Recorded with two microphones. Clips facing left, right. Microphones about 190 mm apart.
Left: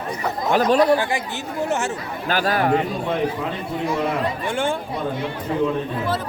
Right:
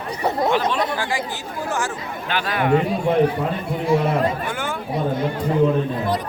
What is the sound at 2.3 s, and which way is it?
Speech, 40° left (ahead or behind).